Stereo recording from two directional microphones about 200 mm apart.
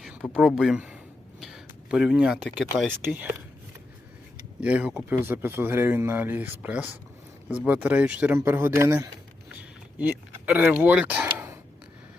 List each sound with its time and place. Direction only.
0.0 s speech: centre (ahead or behind)
4.6 s speech: 5° right (ahead or behind)